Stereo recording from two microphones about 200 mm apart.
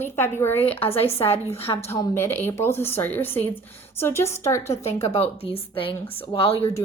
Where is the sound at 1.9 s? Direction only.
10° left (ahead or behind).